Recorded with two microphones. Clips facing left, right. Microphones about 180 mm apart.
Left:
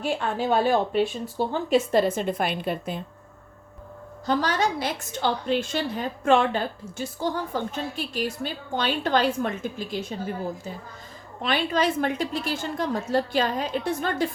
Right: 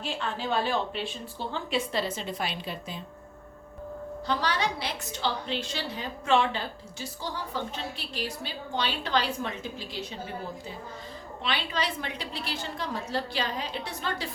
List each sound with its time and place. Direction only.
0.0 s a woman's voice: 50° left (ahead or behind)
4.3 s a woman's voice: 45° left (ahead or behind)
11.4 s a woman's voice: 45° left (ahead or behind)